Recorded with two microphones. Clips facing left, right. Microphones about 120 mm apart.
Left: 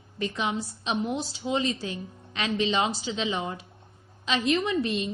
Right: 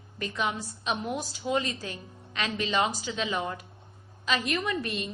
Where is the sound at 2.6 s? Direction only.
20° left (ahead or behind).